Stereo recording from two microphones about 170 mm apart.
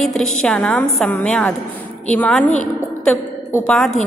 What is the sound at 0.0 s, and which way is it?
A woman's voice, 5° left (ahead or behind).